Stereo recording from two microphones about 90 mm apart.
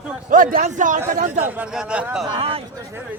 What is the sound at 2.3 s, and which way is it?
Speech, 90° right.